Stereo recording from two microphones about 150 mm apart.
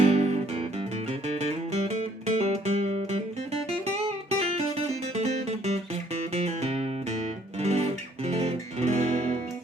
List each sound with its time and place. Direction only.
0.0 s music: 45° right (ahead or behind)
7.6 s guitar: 45° right (ahead or behind)